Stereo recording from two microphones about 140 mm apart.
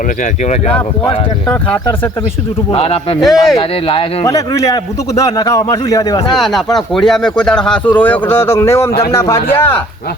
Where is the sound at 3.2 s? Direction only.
Centre (ahead or behind).